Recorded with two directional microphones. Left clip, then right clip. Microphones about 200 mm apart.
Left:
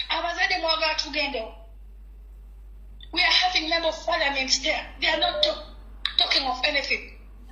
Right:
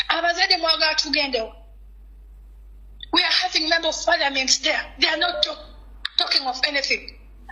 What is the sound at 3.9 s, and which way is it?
A woman's voice, 45° right (ahead or behind).